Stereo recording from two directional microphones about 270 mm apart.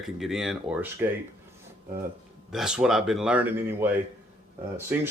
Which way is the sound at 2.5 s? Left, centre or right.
Centre.